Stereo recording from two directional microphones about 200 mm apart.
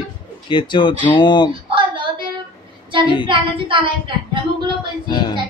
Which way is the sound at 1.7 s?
25° right (ahead or behind).